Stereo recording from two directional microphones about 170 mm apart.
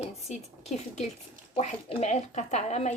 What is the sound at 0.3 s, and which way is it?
A woman's voice, 40° left (ahead or behind).